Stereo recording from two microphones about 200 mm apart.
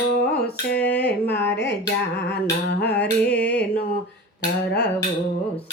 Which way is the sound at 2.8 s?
55° left (ahead or behind).